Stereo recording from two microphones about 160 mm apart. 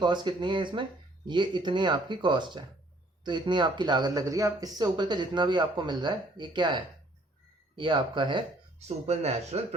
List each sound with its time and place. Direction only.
0.0 s speech: 30° right (ahead or behind)
9.0 s speech: 40° right (ahead or behind)